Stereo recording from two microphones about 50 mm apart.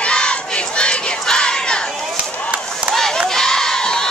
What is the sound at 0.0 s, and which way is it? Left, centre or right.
Crowd, centre.